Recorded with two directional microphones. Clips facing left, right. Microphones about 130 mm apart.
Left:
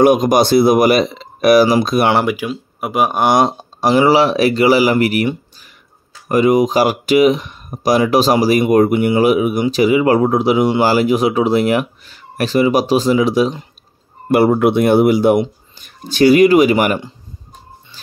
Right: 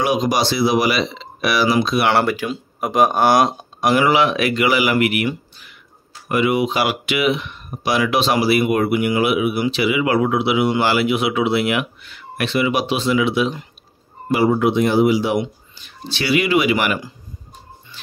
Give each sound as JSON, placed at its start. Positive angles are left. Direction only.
{"t": 0.0, "sound": "speech", "side_deg": 50}
{"t": 2.0, "sound": "speech", "side_deg": 15}
{"t": 14.3, "sound": "speech", "side_deg": 60}